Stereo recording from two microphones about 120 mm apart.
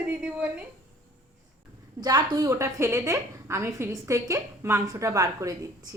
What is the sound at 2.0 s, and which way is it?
A woman's voice, 35° right (ahead or behind).